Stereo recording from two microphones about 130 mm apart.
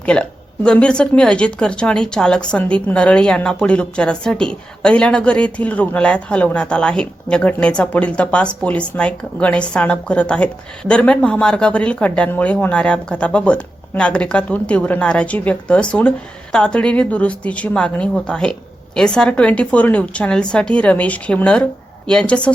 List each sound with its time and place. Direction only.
0.0 s speech: 10° left (ahead or behind)